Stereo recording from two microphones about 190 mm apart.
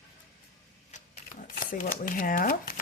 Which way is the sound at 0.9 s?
40° left (ahead or behind).